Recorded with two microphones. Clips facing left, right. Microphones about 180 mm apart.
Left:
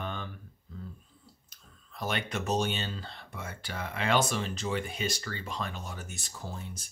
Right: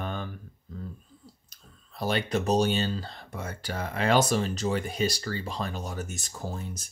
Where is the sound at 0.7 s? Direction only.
40° right (ahead or behind).